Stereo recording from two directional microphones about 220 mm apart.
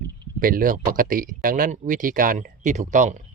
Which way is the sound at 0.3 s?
40° right (ahead or behind).